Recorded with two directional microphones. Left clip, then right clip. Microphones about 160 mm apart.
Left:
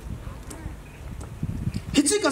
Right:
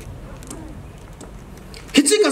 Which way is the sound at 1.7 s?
20° right (ahead or behind).